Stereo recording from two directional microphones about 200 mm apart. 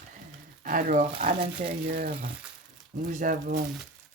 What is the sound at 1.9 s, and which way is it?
Speech, 45° right (ahead or behind).